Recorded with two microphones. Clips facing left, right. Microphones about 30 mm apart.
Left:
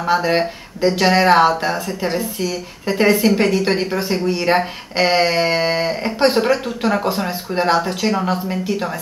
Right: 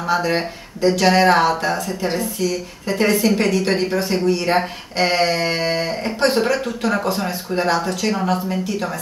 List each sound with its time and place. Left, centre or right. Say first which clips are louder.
0.1 s a woman's voice: left 3 dB; centre